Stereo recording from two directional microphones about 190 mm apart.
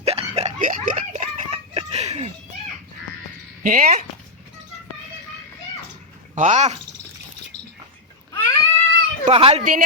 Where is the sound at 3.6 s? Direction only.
45° right (ahead or behind).